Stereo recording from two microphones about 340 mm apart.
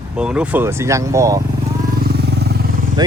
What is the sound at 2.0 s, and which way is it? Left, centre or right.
Vehicle, right.